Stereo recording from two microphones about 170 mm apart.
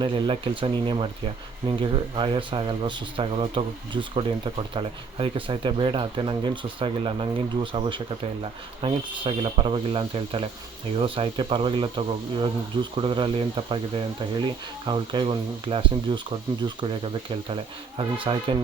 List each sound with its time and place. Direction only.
0.0 s speech: 30° right (ahead or behind)
17.5 s speech: 30° right (ahead or behind)